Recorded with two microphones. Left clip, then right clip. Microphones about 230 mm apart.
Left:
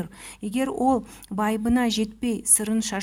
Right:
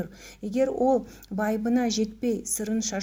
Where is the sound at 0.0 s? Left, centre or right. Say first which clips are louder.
Left 1 dB; left.